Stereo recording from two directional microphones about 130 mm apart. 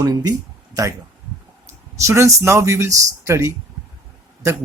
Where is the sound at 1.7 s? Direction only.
20° right (ahead or behind).